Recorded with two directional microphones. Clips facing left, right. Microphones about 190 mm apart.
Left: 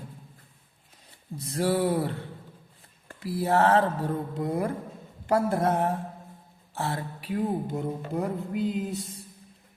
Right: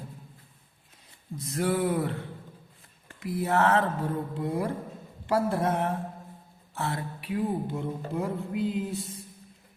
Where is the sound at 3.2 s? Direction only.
30° left (ahead or behind).